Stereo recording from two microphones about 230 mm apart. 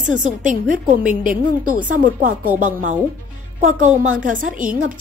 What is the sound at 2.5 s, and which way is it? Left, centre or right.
Speech, centre.